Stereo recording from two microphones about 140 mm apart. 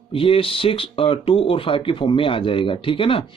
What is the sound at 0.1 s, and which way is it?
Speech, 40° left (ahead or behind).